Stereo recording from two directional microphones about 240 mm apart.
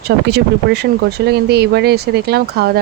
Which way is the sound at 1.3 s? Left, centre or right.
Right.